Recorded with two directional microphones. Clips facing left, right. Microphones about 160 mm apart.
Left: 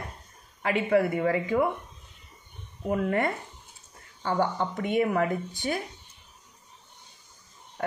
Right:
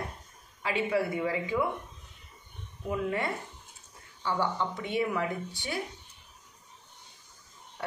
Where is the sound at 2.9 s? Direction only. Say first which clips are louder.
Left 5 dB; 50° left (ahead or behind).